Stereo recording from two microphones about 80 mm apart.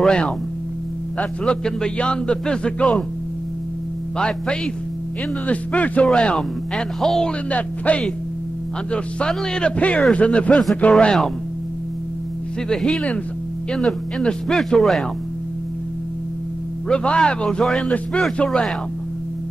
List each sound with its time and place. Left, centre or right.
0.0 s speech: centre
1.4 s speech: centre
4.2 s speech: centre
12.6 s speech: centre
16.9 s speech: centre